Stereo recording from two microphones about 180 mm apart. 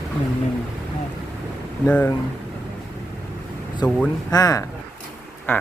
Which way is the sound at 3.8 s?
5° left (ahead or behind).